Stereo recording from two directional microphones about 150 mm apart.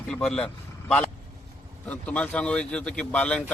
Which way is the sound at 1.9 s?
10° left (ahead or behind).